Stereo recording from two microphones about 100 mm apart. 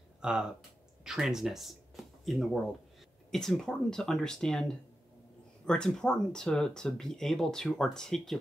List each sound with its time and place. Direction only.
0.2 s speech: 10° right (ahead or behind)